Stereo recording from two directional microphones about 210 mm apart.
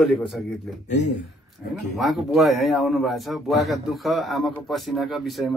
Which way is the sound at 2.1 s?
Centre (ahead or behind).